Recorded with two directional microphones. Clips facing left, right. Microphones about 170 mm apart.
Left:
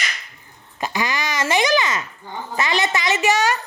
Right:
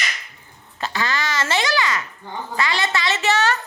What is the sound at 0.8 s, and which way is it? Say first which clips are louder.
A woman's voice: left 1 dB; 15° left (ahead or behind).